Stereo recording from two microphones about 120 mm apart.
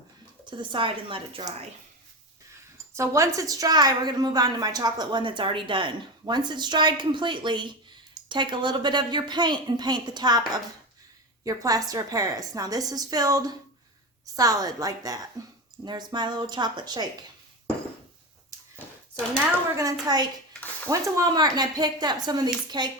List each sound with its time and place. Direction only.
0.5 s speech: 45° right (ahead or behind)
2.9 s a woman's voice: 25° right (ahead or behind)
11.4 s a woman's voice: 30° right (ahead or behind)
19.7 s a woman's voice: 30° right (ahead or behind)